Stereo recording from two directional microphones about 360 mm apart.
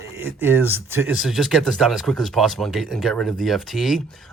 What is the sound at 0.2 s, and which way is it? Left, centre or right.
Speech, centre.